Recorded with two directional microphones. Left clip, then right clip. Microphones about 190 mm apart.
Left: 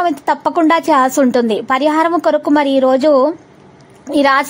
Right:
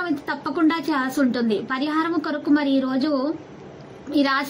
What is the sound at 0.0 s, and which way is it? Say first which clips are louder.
A woman's voice: left 11 dB; 45° left (ahead or behind).